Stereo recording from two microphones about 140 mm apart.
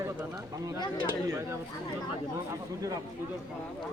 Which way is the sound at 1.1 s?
20° right (ahead or behind).